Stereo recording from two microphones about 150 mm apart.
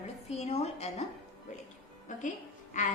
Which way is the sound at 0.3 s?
45° left (ahead or behind).